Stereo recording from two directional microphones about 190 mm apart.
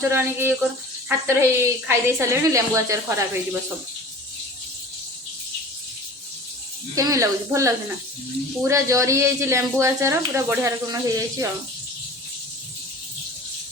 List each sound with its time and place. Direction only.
0.1 s speech: 10° right (ahead or behind)
6.9 s speech: 15° right (ahead or behind)